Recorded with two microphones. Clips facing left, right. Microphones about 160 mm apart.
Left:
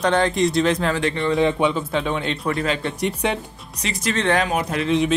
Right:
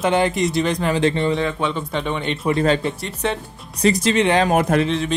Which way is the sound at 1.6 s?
5° left (ahead or behind).